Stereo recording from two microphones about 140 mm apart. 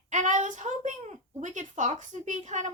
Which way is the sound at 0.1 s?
60° right (ahead or behind).